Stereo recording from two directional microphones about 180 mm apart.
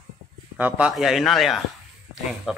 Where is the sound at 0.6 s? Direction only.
5° right (ahead or behind).